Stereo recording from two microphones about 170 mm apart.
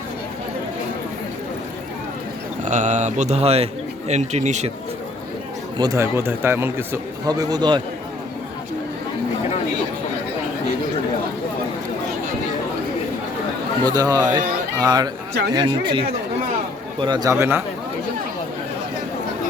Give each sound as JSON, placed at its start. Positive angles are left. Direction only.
{"t": 2.6, "sound": "speech", "side_deg": -45}
{"t": 5.7, "sound": "speech", "side_deg": -20}
{"t": 13.8, "sound": "a man's voice", "side_deg": -20}
{"t": 17.3, "sound": "speech", "side_deg": -15}